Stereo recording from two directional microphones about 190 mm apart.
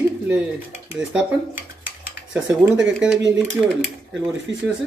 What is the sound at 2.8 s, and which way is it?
Speech, 5° right (ahead or behind).